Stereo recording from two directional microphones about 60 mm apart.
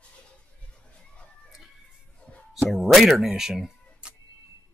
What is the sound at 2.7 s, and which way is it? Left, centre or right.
Speech, centre.